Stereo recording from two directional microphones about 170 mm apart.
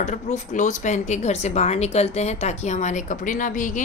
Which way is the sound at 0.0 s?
45° left (ahead or behind).